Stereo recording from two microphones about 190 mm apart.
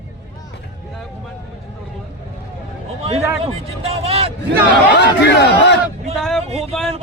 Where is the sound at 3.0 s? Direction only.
35° right (ahead or behind).